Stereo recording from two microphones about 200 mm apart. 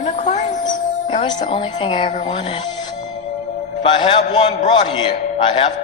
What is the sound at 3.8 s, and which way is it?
A man's voice, 25° left (ahead or behind).